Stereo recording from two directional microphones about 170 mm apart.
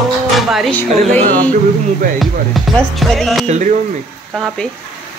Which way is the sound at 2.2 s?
Centre (ahead or behind).